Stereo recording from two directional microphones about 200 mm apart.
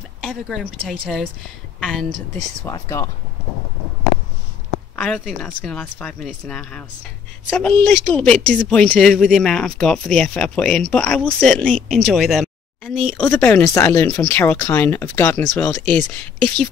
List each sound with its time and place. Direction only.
0.2 s a woman's voice: centre (ahead or behind)
2.6 s speech: 15° left (ahead or behind)
4.9 s speech: 5° left (ahead or behind)